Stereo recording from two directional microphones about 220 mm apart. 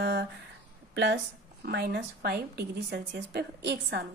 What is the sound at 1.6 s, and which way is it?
A woman's voice, 50° right (ahead or behind).